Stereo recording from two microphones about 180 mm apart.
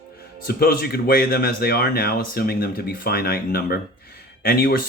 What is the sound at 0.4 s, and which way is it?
Speech, 60° left (ahead or behind).